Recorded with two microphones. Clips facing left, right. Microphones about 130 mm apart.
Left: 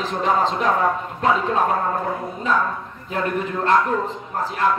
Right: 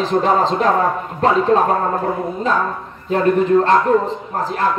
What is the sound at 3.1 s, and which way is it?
Speech, 35° right (ahead or behind).